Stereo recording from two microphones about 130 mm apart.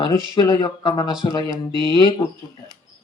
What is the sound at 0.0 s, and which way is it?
Speech, 35° left (ahead or behind).